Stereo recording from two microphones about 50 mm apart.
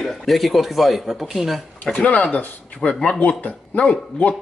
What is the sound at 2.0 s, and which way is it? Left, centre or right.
Speech, left.